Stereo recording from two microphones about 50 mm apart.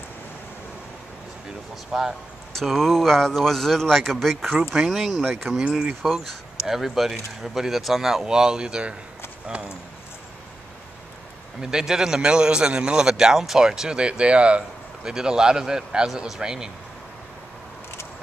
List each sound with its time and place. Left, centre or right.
1.9 s a man's voice: centre
2.6 s speech: centre
4.8 s a man's voice: centre
6.2 s speech: centre
11.6 s a man's voice: centre
15.0 s a man's voice: centre